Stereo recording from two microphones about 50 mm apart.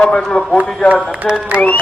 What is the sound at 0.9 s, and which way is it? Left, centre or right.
Speech, right.